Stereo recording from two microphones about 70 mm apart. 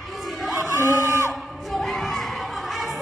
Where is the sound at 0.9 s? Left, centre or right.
Right.